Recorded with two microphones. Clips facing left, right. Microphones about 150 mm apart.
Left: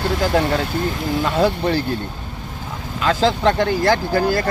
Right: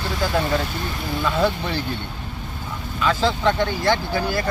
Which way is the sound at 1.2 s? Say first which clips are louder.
Left 2 dB; 40° left (ahead or behind).